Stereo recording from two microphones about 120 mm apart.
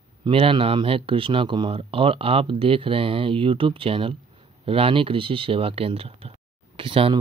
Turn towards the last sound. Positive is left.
turn(degrees=-45)  # may be behind; listen again after turning